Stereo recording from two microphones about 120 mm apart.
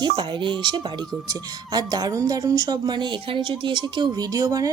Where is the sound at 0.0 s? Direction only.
40° right (ahead or behind).